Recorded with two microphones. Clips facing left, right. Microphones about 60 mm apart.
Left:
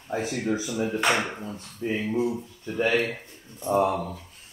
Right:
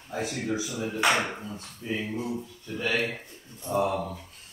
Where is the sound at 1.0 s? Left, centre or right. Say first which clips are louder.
Right 3 dB; centre.